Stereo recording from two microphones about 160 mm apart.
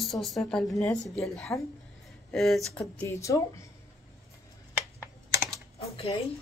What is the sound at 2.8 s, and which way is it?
Speech, 15° left (ahead or behind).